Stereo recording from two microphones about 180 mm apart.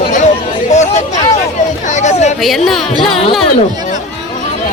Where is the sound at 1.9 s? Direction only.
40° left (ahead or behind).